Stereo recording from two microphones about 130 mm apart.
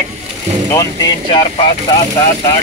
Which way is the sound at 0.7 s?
30° left (ahead or behind).